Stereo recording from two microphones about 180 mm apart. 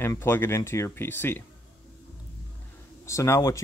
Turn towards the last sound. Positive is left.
turn(degrees=15)  # may be behind; listen again after turning